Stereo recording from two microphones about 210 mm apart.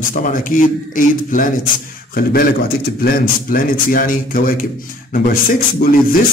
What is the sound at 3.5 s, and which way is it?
A man's voice, 40° left (ahead or behind).